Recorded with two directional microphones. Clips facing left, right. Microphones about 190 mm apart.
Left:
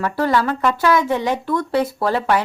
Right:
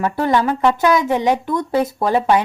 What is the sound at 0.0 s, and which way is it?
A woman's voice, 20° right (ahead or behind).